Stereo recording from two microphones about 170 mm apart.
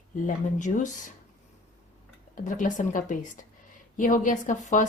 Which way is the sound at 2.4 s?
50° left (ahead or behind).